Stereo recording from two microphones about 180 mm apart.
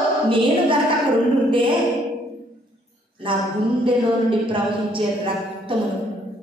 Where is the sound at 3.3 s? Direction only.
30° right (ahead or behind).